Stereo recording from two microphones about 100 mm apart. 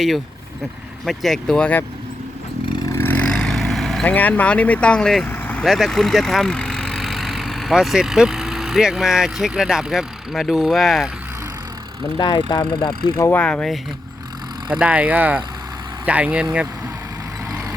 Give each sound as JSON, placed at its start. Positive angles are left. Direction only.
{"t": 1.0, "sound": "speech", "side_deg": 0}
{"t": 2.9, "sound": "vehicle", "side_deg": 20}
{"t": 3.2, "sound": "vehicle", "side_deg": 5}
{"t": 4.0, "sound": "speech", "side_deg": 15}
{"t": 5.3, "sound": "vehicle", "side_deg": 15}
{"t": 5.6, "sound": "speech", "side_deg": 0}
{"t": 12.1, "sound": "speech", "side_deg": 50}
{"t": 13.3, "sound": "speech", "side_deg": 10}
{"t": 14.7, "sound": "speech", "side_deg": -15}